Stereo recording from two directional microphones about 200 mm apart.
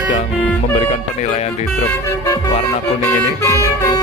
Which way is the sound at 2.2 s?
15° left (ahead or behind).